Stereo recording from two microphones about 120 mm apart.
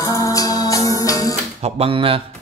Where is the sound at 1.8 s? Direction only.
50° right (ahead or behind).